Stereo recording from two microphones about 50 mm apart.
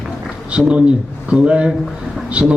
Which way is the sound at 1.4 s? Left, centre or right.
Right.